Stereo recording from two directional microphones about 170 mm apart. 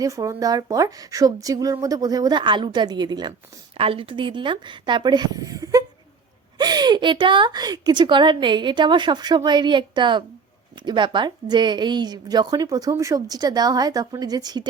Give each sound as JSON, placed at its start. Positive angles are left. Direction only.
{"t": 0.0, "sound": "a woman's voice", "side_deg": -20}